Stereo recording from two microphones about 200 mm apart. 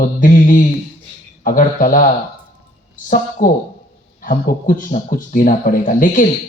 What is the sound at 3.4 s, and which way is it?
Speech, 45° left (ahead or behind).